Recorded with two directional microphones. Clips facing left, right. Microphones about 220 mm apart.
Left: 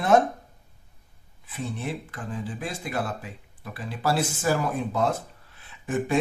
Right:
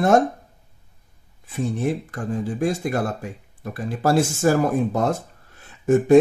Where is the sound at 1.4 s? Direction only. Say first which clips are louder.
Right 8 dB; 45° right (ahead or behind).